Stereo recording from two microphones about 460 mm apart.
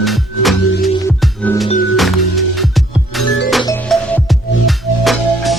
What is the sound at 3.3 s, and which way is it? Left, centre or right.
Music, left.